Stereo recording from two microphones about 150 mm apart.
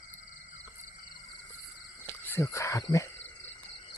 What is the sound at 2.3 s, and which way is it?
Speech, 20° left (ahead or behind).